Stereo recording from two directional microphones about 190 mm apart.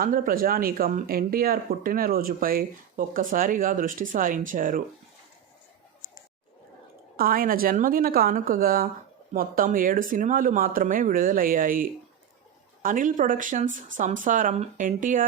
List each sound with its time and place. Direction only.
0.0 s speech: 50° right (ahead or behind)
7.2 s speech: 50° right (ahead or behind)